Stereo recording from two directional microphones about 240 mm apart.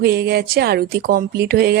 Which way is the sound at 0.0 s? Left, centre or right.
Right.